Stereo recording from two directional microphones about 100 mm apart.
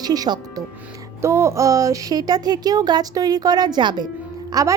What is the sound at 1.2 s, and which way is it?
Speech, 30° right (ahead or behind).